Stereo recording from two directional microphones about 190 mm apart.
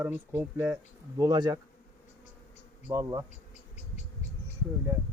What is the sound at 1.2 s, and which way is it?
Speech, 20° right (ahead or behind).